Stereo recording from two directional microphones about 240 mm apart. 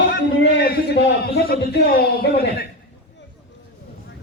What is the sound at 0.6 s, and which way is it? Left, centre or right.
A man's voice, left.